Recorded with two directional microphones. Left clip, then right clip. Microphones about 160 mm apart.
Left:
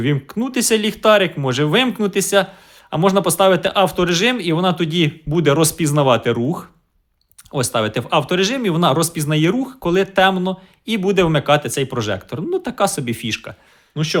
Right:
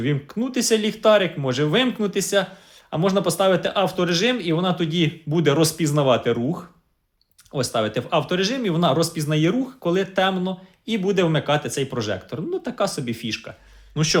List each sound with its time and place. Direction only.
0.0 s speech: 40° left (ahead or behind)
13.9 s a man's voice: 5° left (ahead or behind)